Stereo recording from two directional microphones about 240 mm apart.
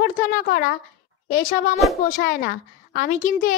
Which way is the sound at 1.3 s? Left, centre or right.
Left.